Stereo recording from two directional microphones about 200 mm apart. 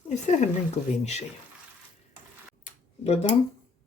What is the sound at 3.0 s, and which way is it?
Speech, 30° left (ahead or behind).